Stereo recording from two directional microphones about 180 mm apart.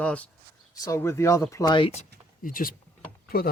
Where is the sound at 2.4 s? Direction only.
50° left (ahead or behind).